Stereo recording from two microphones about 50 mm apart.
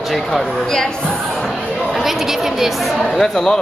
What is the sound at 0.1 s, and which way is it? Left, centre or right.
Speech, centre.